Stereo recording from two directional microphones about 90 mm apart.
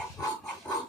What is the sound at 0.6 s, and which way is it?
Dog, 10° left (ahead or behind).